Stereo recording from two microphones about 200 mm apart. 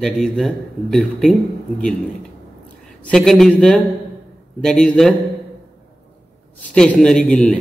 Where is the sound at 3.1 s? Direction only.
Centre (ahead or behind).